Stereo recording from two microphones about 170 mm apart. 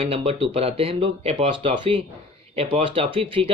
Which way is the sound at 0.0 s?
35° right (ahead or behind).